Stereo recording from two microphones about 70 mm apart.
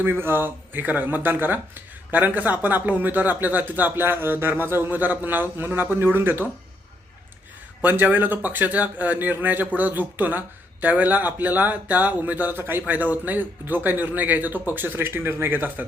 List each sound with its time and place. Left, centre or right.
0.0 s speech: right
7.8 s speech: right